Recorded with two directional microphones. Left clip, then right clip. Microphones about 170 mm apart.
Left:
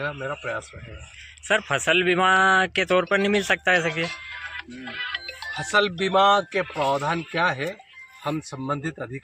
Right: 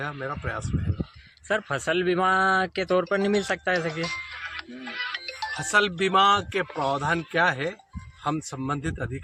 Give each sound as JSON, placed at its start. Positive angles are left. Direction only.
{"t": 0.2, "sound": "speech", "side_deg": -25}
{"t": 1.5, "sound": "a man's voice", "side_deg": 0}
{"t": 4.3, "sound": "speech", "side_deg": -25}